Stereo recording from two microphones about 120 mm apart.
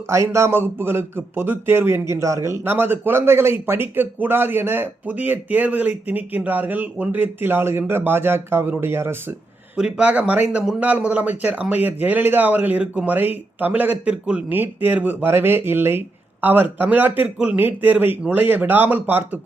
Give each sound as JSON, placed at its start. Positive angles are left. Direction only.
{"t": 0.1, "sound": "a man's voice", "side_deg": -25}
{"t": 9.7, "sound": "speech", "side_deg": -10}